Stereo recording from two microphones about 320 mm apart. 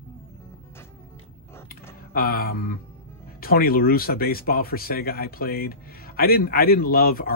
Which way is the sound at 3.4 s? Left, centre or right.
Left.